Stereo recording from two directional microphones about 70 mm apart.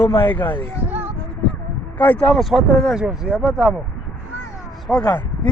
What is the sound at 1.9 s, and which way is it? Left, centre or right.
Speech, left.